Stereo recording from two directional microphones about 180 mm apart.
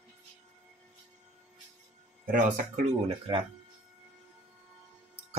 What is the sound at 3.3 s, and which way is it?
Speech, 25° right (ahead or behind).